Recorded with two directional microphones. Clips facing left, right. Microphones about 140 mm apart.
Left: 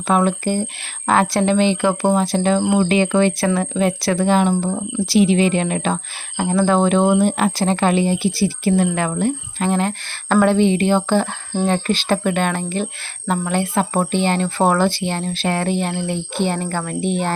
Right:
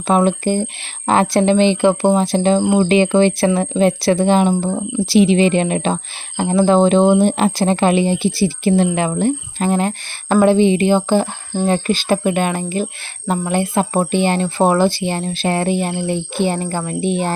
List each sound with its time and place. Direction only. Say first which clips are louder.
0.1 s speech: right 3 dB; 25° right (ahead or behind)